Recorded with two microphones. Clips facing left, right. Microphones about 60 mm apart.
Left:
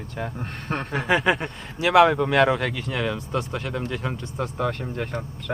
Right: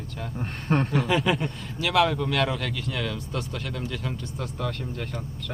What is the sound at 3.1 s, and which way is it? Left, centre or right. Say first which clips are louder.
Speech: left 5 dB; centre.